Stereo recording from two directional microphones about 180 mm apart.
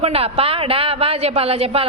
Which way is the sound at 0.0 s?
35° right (ahead or behind).